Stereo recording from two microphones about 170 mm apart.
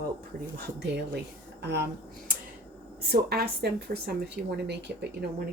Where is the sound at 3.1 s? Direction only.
65° right (ahead or behind).